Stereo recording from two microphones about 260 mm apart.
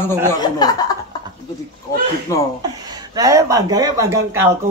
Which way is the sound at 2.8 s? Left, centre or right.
Centre.